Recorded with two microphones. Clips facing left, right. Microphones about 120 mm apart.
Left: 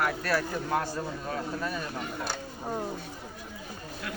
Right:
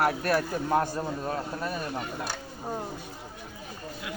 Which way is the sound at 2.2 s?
5° right (ahead or behind).